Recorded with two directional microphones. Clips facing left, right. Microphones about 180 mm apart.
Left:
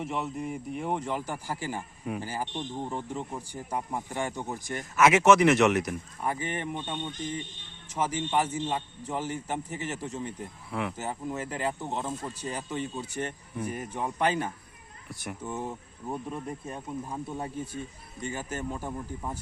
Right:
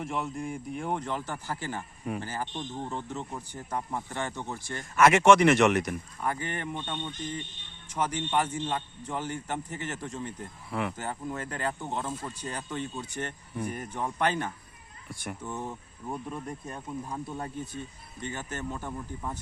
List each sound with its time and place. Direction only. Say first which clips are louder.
0.0 s a man's voice: left 1 dB; 5° left (ahead or behind)
4.9 s a man's voice: right 1 dB; 5° left (ahead or behind)
15.7 s speech: left 1 dB; 25° left (ahead or behind)
16.3 s a man's voice: left 1 dB; 5° left (ahead or behind)
18.8 s speech: left 1 dB; 25° left (ahead or behind)